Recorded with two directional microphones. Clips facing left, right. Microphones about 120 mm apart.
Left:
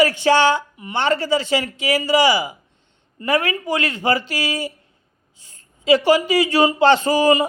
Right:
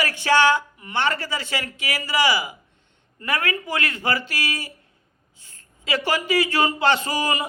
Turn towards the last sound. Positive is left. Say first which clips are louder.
# left 9 dB
turn(degrees=30)  # may be behind; listen again after turning